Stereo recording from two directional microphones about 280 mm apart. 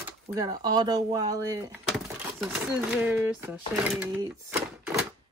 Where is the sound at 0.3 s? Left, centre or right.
Centre.